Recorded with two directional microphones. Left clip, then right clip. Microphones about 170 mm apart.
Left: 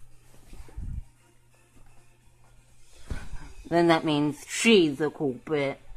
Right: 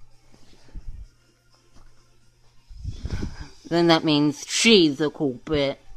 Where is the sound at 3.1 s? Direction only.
30° right (ahead or behind).